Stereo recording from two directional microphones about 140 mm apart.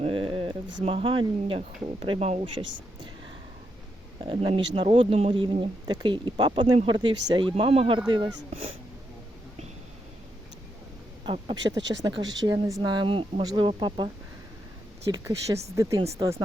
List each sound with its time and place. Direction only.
0.0 s music: 40° right (ahead or behind)
0.9 s speech: 40° right (ahead or behind)
2.1 s speech: 50° right (ahead or behind)
4.2 s speech: 40° right (ahead or behind)
11.3 s speech: 30° right (ahead or behind)
15.1 s speech: 20° right (ahead or behind)